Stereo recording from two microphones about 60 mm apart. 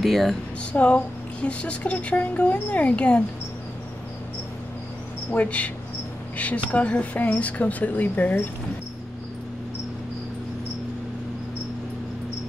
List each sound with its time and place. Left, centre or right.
0.0 s speech: centre
0.7 s a woman's voice: left
5.3 s a woman's voice: left